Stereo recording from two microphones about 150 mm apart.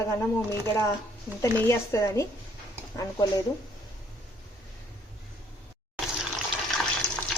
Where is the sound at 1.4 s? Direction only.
20° left (ahead or behind).